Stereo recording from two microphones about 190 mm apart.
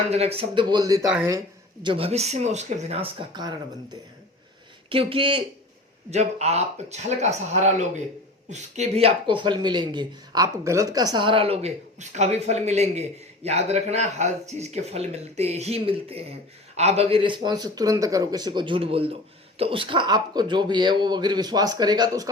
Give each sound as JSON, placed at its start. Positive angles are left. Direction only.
{"t": 0.1, "sound": "a man's voice", "side_deg": -30}
{"t": 4.9, "sound": "a man's voice", "side_deg": -30}